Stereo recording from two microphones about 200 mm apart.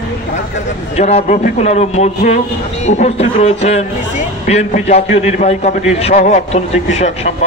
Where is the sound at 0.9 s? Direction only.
35° left (ahead or behind).